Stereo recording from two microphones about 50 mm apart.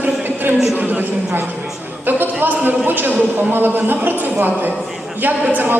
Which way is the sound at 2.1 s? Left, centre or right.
Right.